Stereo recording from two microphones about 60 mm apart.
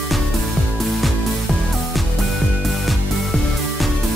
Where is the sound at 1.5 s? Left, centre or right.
Centre.